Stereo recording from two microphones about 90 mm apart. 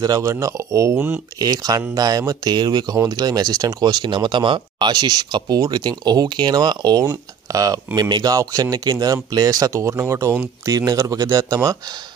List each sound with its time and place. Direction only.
0.0 s speech: 40° right (ahead or behind)
0.9 s speech: 20° right (ahead or behind)
1.4 s speech: 45° right (ahead or behind)